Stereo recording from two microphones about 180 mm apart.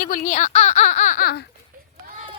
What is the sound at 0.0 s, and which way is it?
Baby laughter, 45° left (ahead or behind).